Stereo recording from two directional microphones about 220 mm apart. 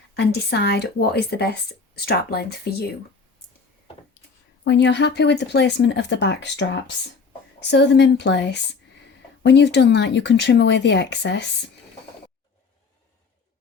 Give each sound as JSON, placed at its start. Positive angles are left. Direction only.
{"t": 0.2, "sound": "speech", "side_deg": 50}
{"t": 4.6, "sound": "speech", "side_deg": 50}